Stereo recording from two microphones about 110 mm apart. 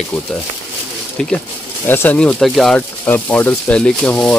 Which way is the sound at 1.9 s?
20° left (ahead or behind).